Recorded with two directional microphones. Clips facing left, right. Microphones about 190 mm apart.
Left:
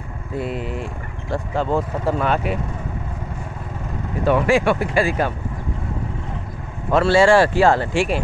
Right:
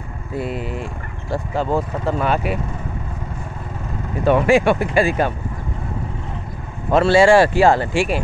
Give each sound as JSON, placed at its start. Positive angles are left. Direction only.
{"t": 0.4, "sound": "speech", "side_deg": -5}
{"t": 4.3, "sound": "speech", "side_deg": -20}
{"t": 6.9, "sound": "speech", "side_deg": -20}